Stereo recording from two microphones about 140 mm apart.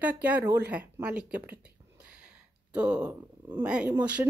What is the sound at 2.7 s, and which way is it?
Speech, 10° right (ahead or behind).